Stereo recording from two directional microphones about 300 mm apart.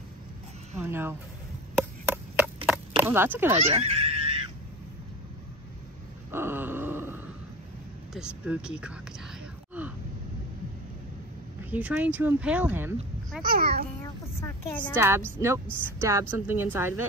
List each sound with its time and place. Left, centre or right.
0.7 s a woman's voice: centre
1.8 s chop: centre
3.0 s a woman's voice: centre
3.6 s speech: centre
6.3 s groan: centre
8.1 s a child's voice: centre
11.7 s a child's voice: centre
13.5 s a child's voice: right
14.0 s a sound: centre
15.0 s a woman's voice: centre